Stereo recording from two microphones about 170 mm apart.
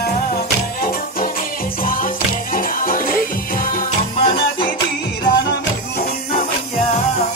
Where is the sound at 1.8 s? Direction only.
55° left (ahead or behind).